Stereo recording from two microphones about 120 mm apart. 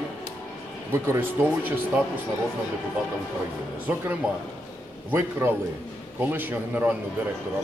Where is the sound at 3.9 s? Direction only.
15° right (ahead or behind).